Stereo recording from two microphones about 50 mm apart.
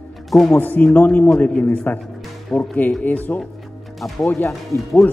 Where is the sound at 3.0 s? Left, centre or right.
Left.